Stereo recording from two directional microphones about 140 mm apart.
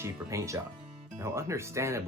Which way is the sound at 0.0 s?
20° right (ahead or behind).